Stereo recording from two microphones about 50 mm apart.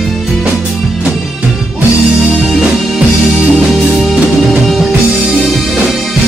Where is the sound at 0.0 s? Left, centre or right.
Centre.